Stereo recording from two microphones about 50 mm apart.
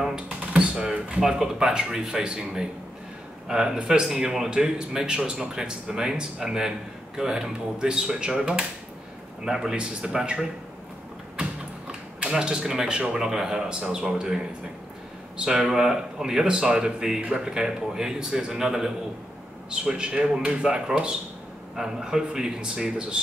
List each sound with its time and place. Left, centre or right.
0.0 s a man's voice: centre
11.9 s a man's voice: centre